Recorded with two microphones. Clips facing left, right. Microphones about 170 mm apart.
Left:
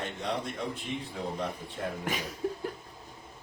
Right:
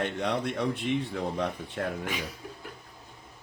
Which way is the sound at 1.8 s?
65° right (ahead or behind).